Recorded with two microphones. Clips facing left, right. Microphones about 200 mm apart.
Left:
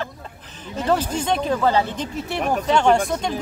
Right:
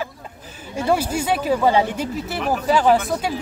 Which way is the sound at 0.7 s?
10° right (ahead or behind).